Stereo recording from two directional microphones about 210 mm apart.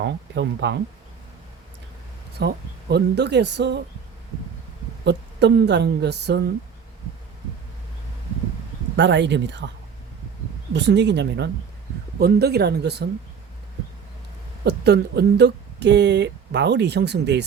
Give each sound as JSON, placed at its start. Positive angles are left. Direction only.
{"t": 0.0, "sound": "speech", "side_deg": -55}
{"t": 2.4, "sound": "speech", "side_deg": -50}
{"t": 5.0, "sound": "speech", "side_deg": -55}
{"t": 9.0, "sound": "speech", "side_deg": -60}
{"t": 10.8, "sound": "speech", "side_deg": -55}
{"t": 14.6, "sound": "speech", "side_deg": -50}